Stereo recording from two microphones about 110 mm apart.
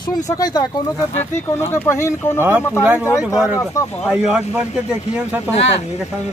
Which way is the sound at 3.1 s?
30° left (ahead or behind).